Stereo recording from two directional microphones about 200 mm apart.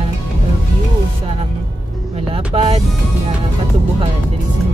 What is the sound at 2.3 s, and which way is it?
Speech, 30° right (ahead or behind).